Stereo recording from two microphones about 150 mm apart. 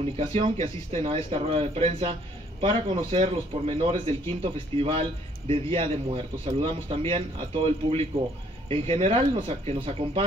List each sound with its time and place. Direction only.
0.0 s a man's voice: 40° right (ahead or behind)